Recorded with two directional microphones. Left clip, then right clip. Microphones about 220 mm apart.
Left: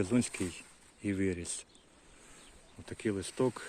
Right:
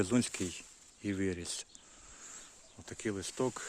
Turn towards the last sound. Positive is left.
turn(degrees=-5)  # may be behind; listen again after turning